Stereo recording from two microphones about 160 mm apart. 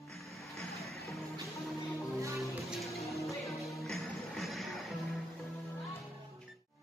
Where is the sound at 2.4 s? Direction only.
Centre (ahead or behind).